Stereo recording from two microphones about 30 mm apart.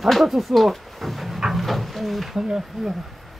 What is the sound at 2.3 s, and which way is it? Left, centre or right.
Speech, right.